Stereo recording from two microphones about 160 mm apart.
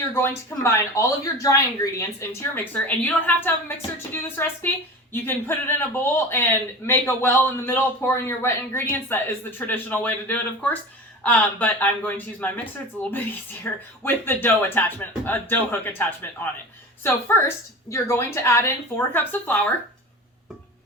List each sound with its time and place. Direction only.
0.1 s a man's voice: 15° left (ahead or behind)